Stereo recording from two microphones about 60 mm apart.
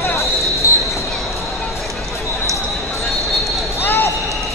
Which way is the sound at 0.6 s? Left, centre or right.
Left.